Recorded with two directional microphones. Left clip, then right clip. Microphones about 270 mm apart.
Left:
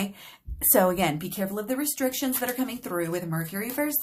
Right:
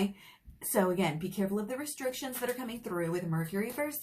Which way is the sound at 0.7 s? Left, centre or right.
Left.